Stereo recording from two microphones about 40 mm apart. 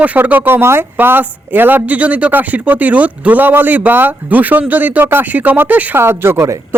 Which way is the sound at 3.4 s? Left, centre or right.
Right.